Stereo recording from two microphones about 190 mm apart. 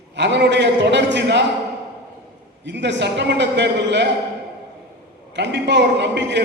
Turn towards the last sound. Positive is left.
turn(degrees=-65)  # may be behind; listen again after turning